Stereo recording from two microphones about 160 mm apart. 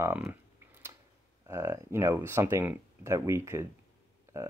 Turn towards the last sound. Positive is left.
turn(degrees=-15)  # may be behind; listen again after turning